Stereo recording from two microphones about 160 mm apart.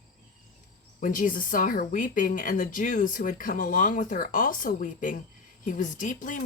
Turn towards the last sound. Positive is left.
turn(degrees=55)  # may be behind; listen again after turning